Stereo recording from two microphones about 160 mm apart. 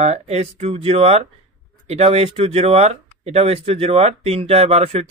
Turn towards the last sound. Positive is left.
turn(degrees=-40)  # may be behind; listen again after turning